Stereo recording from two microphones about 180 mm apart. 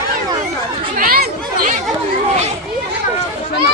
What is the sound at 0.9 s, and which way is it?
Chatter, 55° right (ahead or behind).